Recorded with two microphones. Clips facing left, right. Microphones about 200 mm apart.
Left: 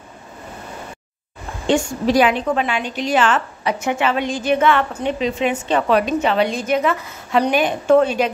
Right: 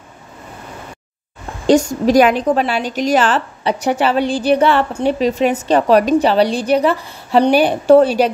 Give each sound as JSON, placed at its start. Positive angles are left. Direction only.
{"t": 1.7, "sound": "a woman's voice", "side_deg": -40}